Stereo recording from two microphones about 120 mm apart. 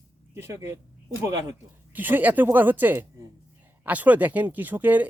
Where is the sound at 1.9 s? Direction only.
15° right (ahead or behind).